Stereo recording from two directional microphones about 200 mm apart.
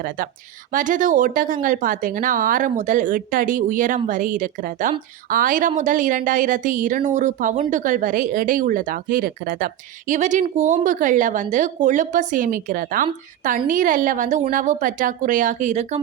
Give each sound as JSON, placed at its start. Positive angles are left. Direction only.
{"t": 0.7, "sound": "speech", "side_deg": -40}